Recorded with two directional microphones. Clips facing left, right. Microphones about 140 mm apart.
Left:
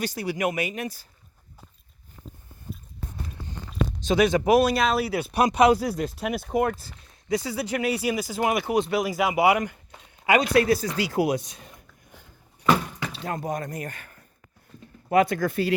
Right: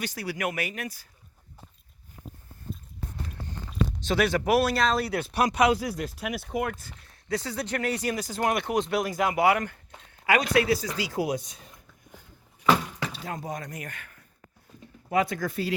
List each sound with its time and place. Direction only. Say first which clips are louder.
0.0 s speech: left 4 dB; 25° left (ahead or behind)
4.0 s speech: left 5 dB; 15° left (ahead or behind)
5.3 s speech: left 4 dB; 25° left (ahead or behind)
5.7 s speech: left 4 dB; 40° left (ahead or behind)
7.0 s speech: left 4 dB; 15° left (ahead or behind)
10.5 s speech: left 3 dB; 45° left (ahead or behind); by 11.7 s 75° left (ahead or behind)
13.2 s speech: left 5 dB; 55° left (ahead or behind); by 14.3 s 35° left (ahead or behind)
15.1 s speech: left 5 dB; 65° left (ahead or behind)